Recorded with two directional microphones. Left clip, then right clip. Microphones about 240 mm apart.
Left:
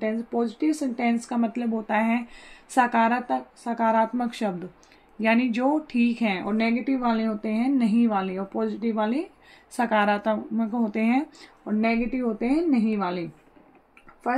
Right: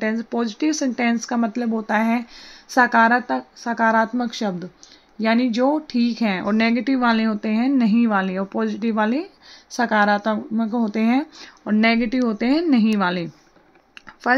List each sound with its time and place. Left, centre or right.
0.0 s speech: right